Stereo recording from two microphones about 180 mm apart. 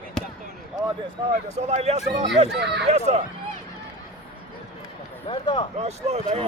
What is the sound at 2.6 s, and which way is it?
Speech, 70° right (ahead or behind).